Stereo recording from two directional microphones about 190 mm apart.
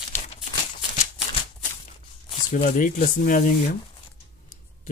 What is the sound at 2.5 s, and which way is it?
Speech, 40° left (ahead or behind).